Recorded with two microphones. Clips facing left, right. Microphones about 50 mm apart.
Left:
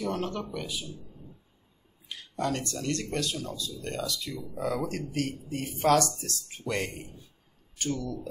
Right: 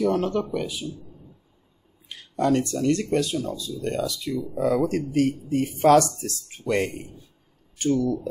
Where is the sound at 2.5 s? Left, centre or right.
Centre.